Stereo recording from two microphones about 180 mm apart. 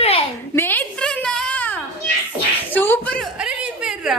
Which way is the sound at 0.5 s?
10° left (ahead or behind).